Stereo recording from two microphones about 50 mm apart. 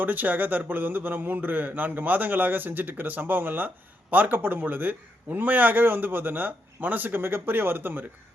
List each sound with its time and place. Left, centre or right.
0.0 s a man's voice: right